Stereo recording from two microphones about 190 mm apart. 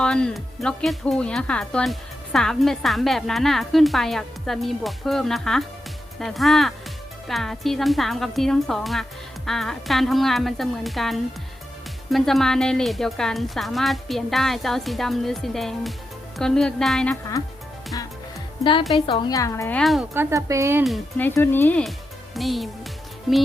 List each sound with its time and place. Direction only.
0.0 s speech: 5° left (ahead or behind)
17.9 s music: 20° left (ahead or behind)
18.9 s a woman's voice: 25° left (ahead or behind)
19.8 s speech: centre (ahead or behind)
20.1 s speech: 15° right (ahead or behind)
20.8 s speech: centre (ahead or behind)
21.2 s a woman's voice: 10° left (ahead or behind)